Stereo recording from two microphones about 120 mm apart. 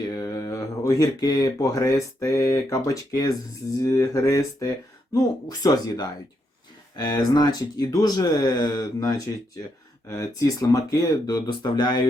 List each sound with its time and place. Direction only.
0.2 s speech: 30° left (ahead or behind)